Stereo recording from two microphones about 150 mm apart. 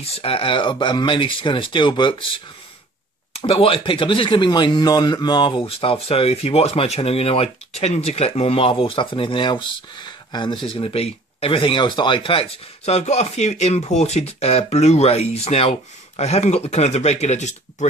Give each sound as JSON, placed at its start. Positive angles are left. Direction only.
{"t": 0.0, "sound": "speech", "side_deg": 40}